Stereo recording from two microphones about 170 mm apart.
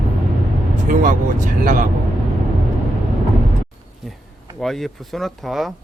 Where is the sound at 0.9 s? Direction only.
50° right (ahead or behind).